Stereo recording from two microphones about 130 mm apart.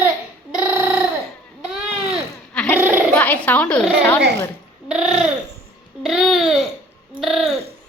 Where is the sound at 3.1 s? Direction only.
15° left (ahead or behind).